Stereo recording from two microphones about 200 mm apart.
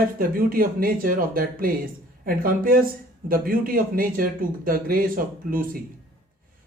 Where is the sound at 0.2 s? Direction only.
45° right (ahead or behind).